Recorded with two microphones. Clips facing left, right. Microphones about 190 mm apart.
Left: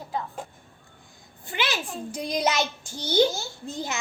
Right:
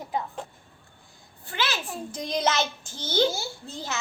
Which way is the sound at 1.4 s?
15° left (ahead or behind).